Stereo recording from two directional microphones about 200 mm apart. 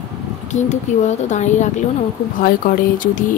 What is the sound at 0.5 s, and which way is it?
Speech, 35° left (ahead or behind).